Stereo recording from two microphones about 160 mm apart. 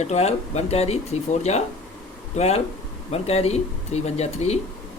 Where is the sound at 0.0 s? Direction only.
45° left (ahead or behind).